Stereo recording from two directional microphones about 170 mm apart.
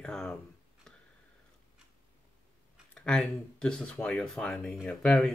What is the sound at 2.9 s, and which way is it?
Speech, 5° left (ahead or behind).